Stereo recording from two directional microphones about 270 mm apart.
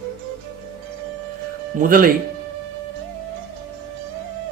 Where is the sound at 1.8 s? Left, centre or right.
Right.